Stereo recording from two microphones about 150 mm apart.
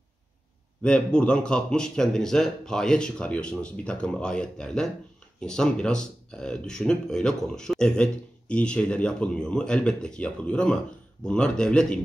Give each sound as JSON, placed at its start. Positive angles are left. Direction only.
{"t": 0.8, "sound": "speech", "side_deg": 5}